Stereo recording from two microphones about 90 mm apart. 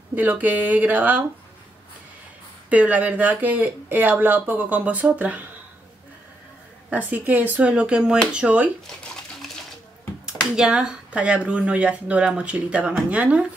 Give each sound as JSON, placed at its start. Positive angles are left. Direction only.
{"t": 0.1, "sound": "speech", "side_deg": -20}
{"t": 2.7, "sound": "speech", "side_deg": -15}
{"t": 7.1, "sound": "speech", "side_deg": -20}
{"t": 10.5, "sound": "speech", "side_deg": -10}